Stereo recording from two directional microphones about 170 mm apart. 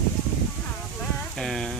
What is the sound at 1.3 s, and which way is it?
Speech, 5° left (ahead or behind).